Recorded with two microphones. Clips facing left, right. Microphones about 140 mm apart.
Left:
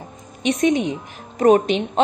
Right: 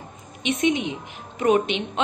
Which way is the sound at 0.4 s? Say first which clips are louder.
Left 4 dB; 40° left (ahead or behind).